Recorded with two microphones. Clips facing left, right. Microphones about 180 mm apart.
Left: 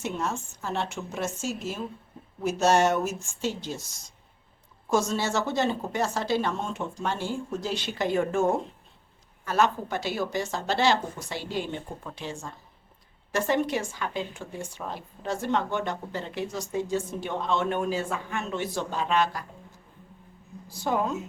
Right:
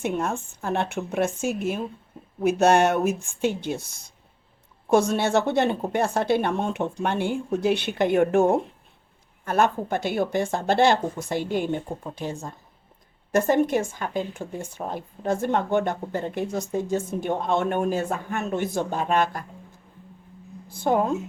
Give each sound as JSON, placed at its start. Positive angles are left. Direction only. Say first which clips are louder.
{"t": 0.0, "sound": "a woman's voice", "louder": "right 4 dB", "side_deg": -55}
{"t": 13.3, "sound": "a woman's voice", "louder": "right 5 dB", "side_deg": -50}
{"t": 20.7, "sound": "a woman's voice", "louder": "right 5 dB", "side_deg": -55}